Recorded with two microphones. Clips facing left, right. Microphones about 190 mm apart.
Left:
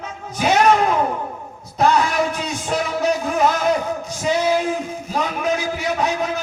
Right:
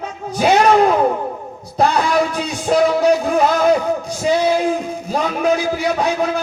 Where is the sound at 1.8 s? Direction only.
35° right (ahead or behind).